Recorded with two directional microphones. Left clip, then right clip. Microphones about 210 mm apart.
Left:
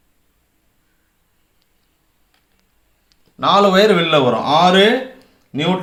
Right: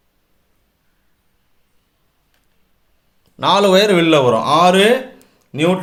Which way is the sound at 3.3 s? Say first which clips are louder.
Even; 50° right (ahead or behind).